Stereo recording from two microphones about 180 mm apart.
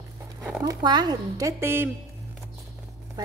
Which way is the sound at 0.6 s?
25° right (ahead or behind).